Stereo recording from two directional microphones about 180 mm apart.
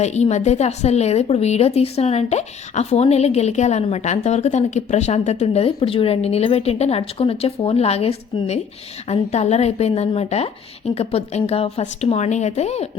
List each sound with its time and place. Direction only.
0.0 s speech: 40° left (ahead or behind)